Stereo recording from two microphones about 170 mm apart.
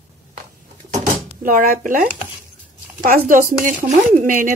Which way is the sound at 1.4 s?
55° right (ahead or behind).